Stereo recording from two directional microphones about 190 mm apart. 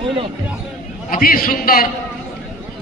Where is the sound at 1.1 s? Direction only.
50° left (ahead or behind).